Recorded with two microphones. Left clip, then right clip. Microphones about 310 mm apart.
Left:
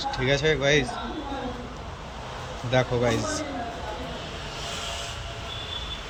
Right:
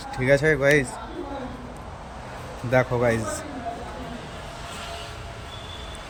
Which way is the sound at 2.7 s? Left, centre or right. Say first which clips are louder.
Right 3 dB; centre.